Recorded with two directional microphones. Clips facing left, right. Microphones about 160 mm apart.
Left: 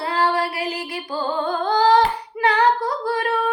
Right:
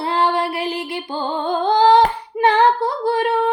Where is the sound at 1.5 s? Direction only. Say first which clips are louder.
Right 4 dB; 25° right (ahead or behind).